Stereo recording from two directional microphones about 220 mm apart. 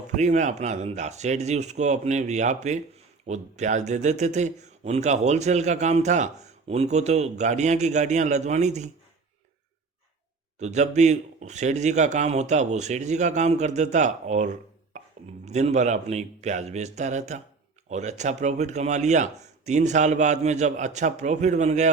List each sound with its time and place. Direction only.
0.2 s speech: 30° right (ahead or behind)
10.6 s speech: 30° right (ahead or behind)
14.9 s a sound: 35° right (ahead or behind)
15.4 s speech: 30° right (ahead or behind)